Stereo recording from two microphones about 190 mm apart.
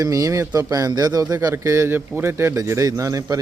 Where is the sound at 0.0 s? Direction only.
20° right (ahead or behind).